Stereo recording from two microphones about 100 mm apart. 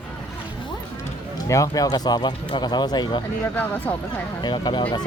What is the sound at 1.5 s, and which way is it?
Speech, 35° left (ahead or behind).